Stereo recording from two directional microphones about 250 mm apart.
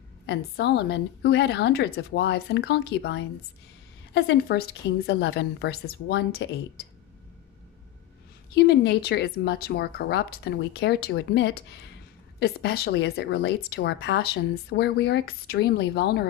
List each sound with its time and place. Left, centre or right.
0.3 s speech: left
8.5 s speech: left